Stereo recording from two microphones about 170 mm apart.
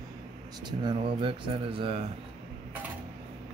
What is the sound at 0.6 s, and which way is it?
Speech, 25° right (ahead or behind).